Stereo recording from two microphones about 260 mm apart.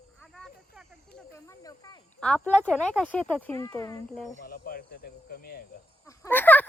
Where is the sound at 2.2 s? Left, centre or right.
Centre.